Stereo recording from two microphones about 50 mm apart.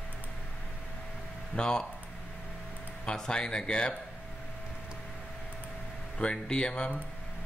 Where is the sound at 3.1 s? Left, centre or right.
Centre.